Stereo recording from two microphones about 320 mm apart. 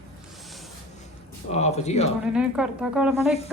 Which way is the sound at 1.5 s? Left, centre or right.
Centre.